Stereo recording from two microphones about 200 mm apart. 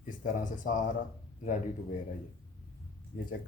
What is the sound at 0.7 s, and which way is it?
Speech, 45° left (ahead or behind).